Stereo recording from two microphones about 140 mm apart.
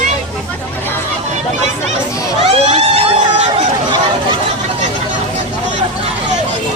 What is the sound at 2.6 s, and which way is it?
Vehicle, 50° right (ahead or behind).